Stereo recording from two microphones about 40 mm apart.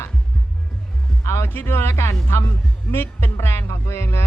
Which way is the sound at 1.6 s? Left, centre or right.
Left.